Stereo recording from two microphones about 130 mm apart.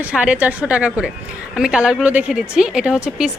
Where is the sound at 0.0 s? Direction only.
10° right (ahead or behind).